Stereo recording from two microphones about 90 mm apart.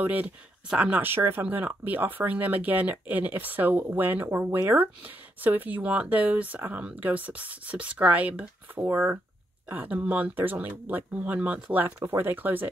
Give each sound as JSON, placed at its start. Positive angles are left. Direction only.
{"t": 0.0, "sound": "speech", "side_deg": -20}
{"t": 12.0, "sound": "speech", "side_deg": -30}